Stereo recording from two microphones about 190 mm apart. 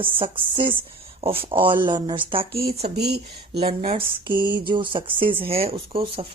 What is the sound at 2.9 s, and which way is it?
Speech, 60° right (ahead or behind).